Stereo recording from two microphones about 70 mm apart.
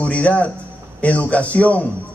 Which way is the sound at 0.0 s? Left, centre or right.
Centre.